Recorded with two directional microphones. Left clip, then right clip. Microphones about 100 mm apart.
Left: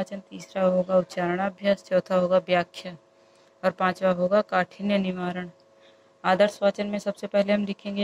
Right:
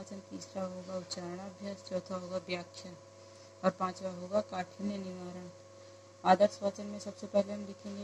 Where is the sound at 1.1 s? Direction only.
35° left (ahead or behind).